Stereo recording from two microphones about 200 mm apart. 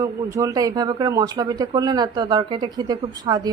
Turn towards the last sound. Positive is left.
turn(degrees=-20)  # may be behind; listen again after turning